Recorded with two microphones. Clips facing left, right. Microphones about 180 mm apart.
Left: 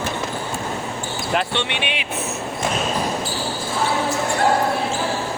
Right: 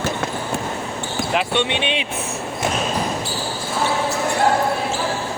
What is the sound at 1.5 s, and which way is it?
Speech, 25° right (ahead or behind).